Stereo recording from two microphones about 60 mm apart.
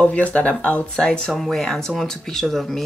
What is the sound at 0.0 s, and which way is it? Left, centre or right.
Speech, left.